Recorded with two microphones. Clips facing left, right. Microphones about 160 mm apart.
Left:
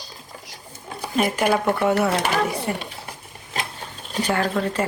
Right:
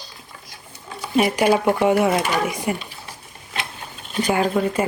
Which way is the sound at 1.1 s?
5° right (ahead or behind).